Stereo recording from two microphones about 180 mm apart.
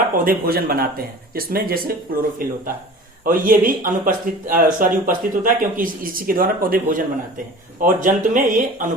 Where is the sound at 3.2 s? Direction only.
50° right (ahead or behind).